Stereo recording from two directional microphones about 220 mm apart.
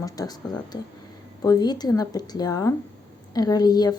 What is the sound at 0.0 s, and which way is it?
A woman's voice, 15° left (ahead or behind).